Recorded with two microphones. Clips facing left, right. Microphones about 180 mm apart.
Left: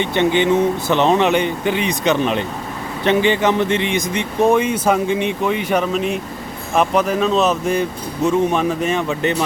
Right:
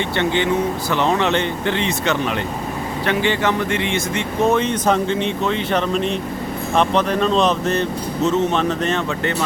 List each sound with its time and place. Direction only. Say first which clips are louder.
0.0 s speech: left 3 dB; 20° left (ahead or behind)